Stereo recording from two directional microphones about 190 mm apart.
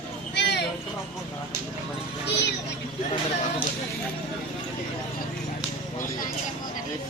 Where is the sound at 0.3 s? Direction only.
65° left (ahead or behind).